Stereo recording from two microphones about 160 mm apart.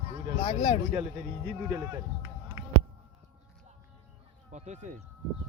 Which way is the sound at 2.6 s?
15° right (ahead or behind).